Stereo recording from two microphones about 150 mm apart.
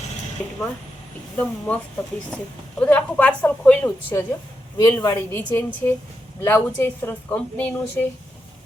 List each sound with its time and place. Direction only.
1.4 s speech: 10° left (ahead or behind)